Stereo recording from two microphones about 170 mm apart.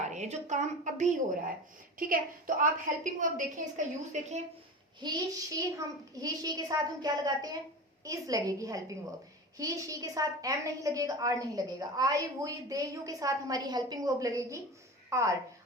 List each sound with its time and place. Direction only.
0.1 s a woman's voice: 45° right (ahead or behind)
4.9 s a woman's voice: 25° right (ahead or behind)